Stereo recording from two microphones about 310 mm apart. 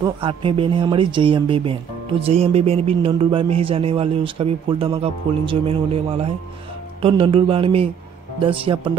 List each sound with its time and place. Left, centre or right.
0.0 s speech: centre